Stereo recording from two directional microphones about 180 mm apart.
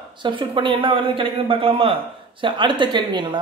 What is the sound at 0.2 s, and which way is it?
Speech, 25° right (ahead or behind).